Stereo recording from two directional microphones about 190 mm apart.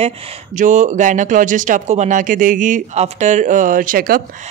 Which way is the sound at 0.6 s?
40° right (ahead or behind).